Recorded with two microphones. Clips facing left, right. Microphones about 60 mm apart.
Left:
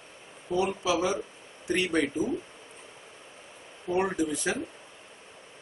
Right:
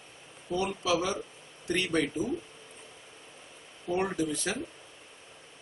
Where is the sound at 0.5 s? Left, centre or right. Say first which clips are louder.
Left 2 dB; centre.